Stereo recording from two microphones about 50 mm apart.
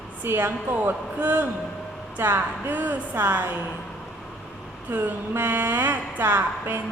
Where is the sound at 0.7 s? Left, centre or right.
Right.